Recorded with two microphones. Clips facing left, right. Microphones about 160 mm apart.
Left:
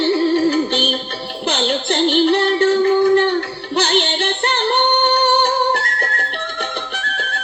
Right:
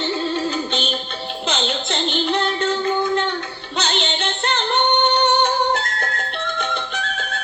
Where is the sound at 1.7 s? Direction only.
60° left (ahead or behind).